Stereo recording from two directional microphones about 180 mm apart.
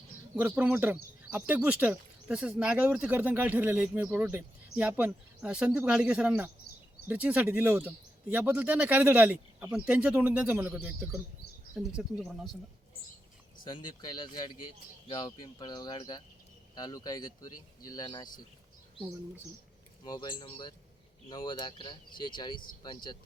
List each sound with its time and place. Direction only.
0.3 s speech: 10° right (ahead or behind)
13.7 s speech: 25° left (ahead or behind)
20.1 s speech: 25° left (ahead or behind)